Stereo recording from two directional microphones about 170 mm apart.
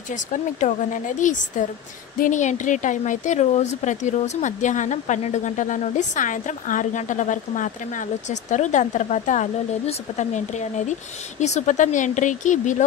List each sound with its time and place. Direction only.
0.1 s speech: 45° left (ahead or behind)